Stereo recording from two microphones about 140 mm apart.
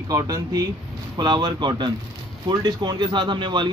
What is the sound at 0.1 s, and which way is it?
Speech, 25° right (ahead or behind).